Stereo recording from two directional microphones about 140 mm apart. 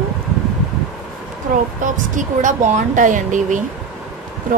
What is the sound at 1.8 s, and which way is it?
Speech, 65° right (ahead or behind).